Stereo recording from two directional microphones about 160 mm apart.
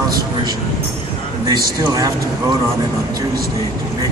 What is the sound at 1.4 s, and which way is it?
Speech, 20° right (ahead or behind).